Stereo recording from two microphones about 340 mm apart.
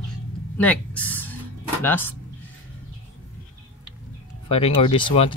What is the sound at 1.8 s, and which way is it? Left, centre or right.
Speech, centre.